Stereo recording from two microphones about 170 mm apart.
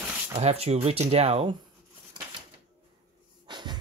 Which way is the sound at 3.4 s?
25° right (ahead or behind).